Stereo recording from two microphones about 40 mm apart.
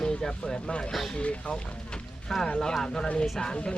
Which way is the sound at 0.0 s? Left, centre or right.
Centre.